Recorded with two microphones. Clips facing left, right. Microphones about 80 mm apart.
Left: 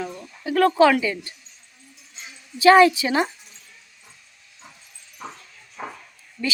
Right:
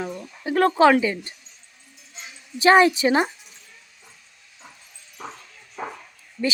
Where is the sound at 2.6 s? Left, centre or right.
Right.